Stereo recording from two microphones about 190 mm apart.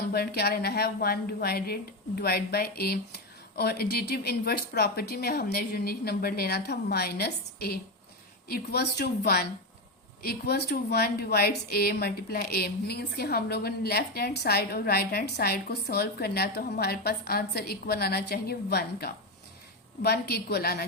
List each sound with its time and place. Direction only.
0.1 s a woman's voice: 55° left (ahead or behind)